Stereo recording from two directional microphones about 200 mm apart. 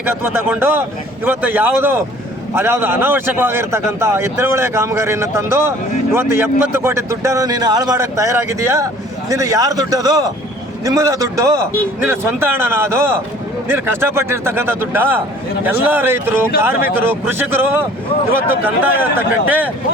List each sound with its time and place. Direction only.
0.2 s a man's voice: 10° right (ahead or behind)